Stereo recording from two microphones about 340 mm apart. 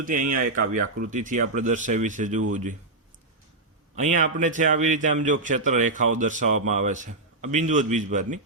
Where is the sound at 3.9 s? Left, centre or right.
Right.